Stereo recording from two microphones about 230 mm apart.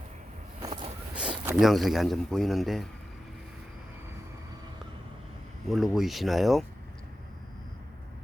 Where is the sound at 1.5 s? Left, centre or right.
Centre.